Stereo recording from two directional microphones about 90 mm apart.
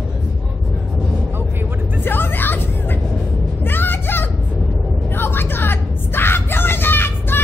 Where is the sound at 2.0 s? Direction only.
25° left (ahead or behind).